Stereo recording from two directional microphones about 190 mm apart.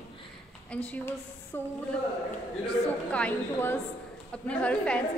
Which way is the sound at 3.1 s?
10° left (ahead or behind).